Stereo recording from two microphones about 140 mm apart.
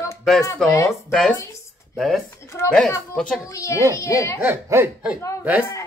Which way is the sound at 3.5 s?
20° left (ahead or behind).